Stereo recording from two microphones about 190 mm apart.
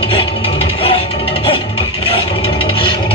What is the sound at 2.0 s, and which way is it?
Scrape, 30° left (ahead or behind).